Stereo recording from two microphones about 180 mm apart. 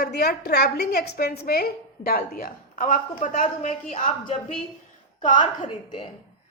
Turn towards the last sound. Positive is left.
turn(degrees=25)  # may be behind; listen again after turning